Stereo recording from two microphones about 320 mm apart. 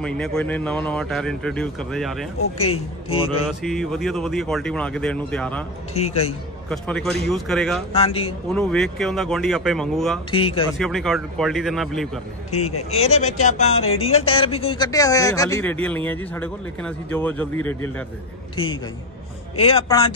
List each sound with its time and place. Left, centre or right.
0.0 s a man's voice: centre
2.6 s a man's voice: centre
3.4 s a man's voice: centre
5.9 s speech: centre
6.7 s a man's voice: centre
7.9 s a man's voice: centre
8.5 s a man's voice: centre
10.3 s a man's voice: centre
10.8 s a man's voice: centre
12.9 s a man's voice: centre
19.6 s a man's voice: centre